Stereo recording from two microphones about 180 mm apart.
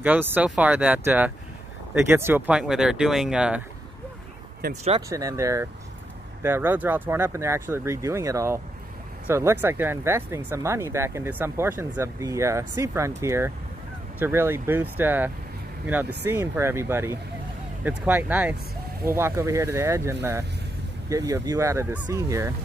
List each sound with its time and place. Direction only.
0.0 s speech: 10° right (ahead or behind)
5.1 s speech: 15° right (ahead or behind)